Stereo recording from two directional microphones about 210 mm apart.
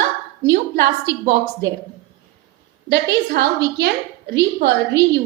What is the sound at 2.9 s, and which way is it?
A woman's voice, 50° right (ahead or behind).